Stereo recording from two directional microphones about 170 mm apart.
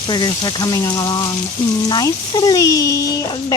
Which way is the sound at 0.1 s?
25° left (ahead or behind).